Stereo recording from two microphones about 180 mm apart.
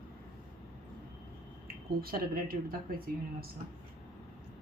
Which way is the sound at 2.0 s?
55° right (ahead or behind).